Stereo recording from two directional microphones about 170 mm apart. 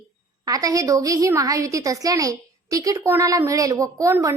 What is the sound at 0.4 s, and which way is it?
A woman's voice, 20° right (ahead or behind).